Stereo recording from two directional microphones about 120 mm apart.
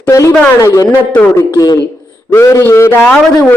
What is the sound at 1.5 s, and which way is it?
A man's voice, 30° left (ahead or behind).